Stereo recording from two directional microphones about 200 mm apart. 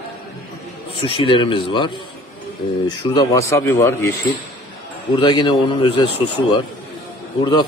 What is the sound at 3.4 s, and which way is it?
Speech, 15° left (ahead or behind).